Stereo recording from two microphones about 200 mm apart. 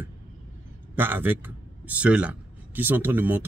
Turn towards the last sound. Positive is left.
turn(degrees=-10)  # may be behind; listen again after turning